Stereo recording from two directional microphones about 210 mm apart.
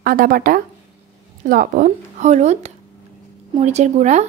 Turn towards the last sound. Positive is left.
turn(degrees=-35)  # may be behind; listen again after turning